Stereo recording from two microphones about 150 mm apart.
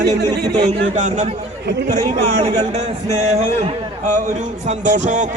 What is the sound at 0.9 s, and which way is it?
A man's voice, 50° right (ahead or behind).